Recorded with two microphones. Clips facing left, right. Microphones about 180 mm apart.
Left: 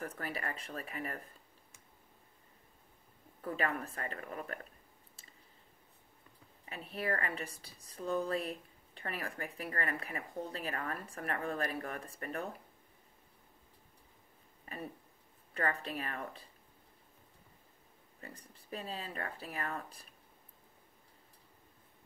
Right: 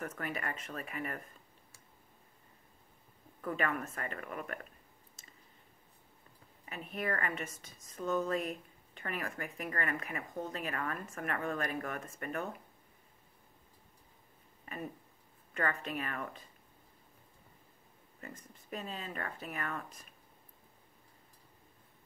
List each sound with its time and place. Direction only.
0.0 s a woman's voice: 35° left (ahead or behind)
3.3 s a woman's voice: 35° left (ahead or behind)
5.2 s a sound: 35° left (ahead or behind)
6.7 s a woman's voice: 35° left (ahead or behind)
15.5 s a woman's voice: 35° left (ahead or behind)
18.2 s a woman's voice: 35° left (ahead or behind)